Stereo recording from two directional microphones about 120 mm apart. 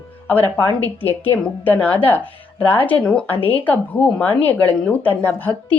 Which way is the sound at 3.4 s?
55° left (ahead or behind).